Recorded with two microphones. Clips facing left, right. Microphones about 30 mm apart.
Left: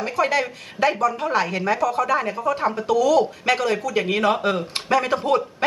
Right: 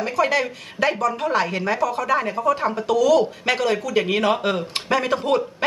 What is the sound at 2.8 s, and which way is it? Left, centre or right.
Speech, right.